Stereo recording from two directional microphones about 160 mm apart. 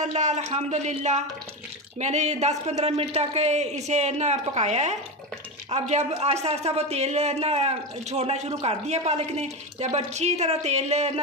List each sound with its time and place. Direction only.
0.0 s a woman's voice: 45° right (ahead or behind)